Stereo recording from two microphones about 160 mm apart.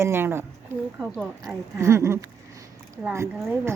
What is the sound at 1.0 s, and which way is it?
Speech, 5° left (ahead or behind).